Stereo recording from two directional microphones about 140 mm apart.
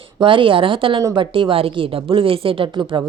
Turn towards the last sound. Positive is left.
turn(degrees=-35)  # may be behind; listen again after turning